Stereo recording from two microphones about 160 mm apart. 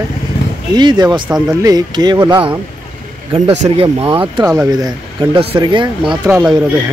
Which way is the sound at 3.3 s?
40° right (ahead or behind).